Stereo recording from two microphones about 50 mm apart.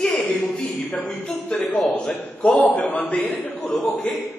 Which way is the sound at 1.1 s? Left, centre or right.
Left.